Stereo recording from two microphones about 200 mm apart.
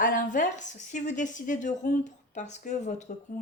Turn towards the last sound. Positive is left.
turn(degrees=35)  # may be behind; listen again after turning